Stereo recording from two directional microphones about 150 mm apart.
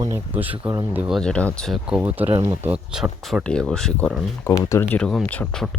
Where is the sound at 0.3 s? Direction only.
10° right (ahead or behind).